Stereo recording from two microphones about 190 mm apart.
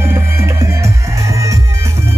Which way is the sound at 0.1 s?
15° right (ahead or behind).